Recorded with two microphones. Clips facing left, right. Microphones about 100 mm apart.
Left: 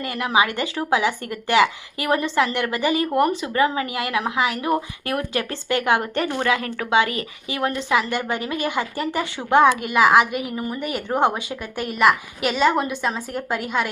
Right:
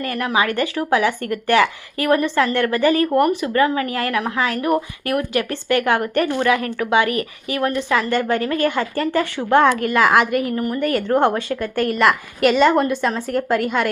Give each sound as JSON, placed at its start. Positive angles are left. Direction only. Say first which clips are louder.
{"t": 0.0, "sound": "a woman's voice", "louder": "right 1 dB", "side_deg": 20}
{"t": 7.9, "sound": "a woman's voice", "louder": "right 4 dB", "side_deg": 15}